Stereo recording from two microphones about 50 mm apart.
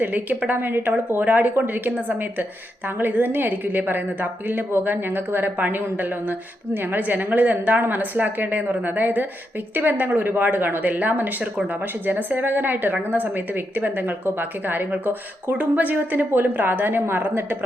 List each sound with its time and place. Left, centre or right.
0.0 s a woman's voice: right